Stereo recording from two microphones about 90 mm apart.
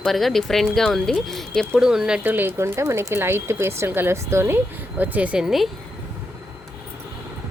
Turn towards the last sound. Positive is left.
turn(degrees=-5)  # may be behind; listen again after turning